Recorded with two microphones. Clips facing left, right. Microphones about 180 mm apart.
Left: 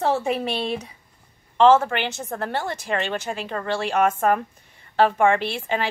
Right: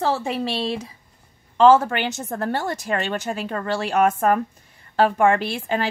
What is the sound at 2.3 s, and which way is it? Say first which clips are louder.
A woman's voice: right 3 dB; 40° right (ahead or behind).